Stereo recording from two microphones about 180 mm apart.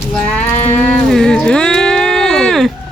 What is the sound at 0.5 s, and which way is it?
Livestock, 40° left (ahead or behind).